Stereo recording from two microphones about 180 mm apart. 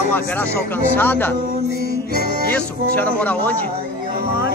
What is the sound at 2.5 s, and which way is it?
A man's voice, 10° left (ahead or behind).